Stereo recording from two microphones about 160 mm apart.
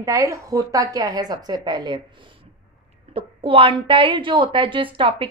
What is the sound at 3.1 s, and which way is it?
A woman's voice, 35° right (ahead or behind).